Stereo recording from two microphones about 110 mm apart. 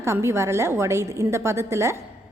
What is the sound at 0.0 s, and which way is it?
A woman's voice, 25° right (ahead or behind).